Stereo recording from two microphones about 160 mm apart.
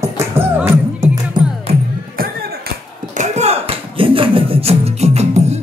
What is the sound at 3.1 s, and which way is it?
Music, 45° right (ahead or behind).